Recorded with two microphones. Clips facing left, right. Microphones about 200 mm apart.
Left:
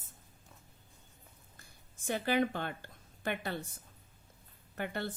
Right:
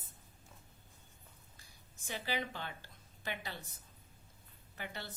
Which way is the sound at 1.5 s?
50° left (ahead or behind).